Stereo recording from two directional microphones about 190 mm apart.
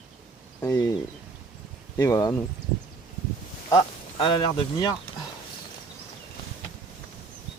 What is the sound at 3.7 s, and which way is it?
Speech, 25° left (ahead or behind).